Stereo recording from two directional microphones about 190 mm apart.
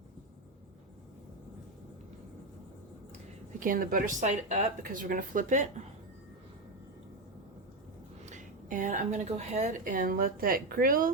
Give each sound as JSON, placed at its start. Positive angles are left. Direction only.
{"t": 3.6, "sound": "a woman's voice", "side_deg": -45}
{"t": 8.2, "sound": "a woman's voice", "side_deg": -40}